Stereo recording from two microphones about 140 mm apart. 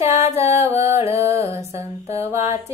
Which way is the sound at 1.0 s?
45° left (ahead or behind).